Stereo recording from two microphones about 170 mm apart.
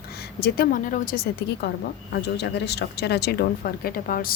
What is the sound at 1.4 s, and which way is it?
Speech, 65° left (ahead or behind).